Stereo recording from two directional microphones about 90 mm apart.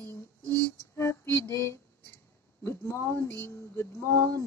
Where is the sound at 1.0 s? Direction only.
30° left (ahead or behind).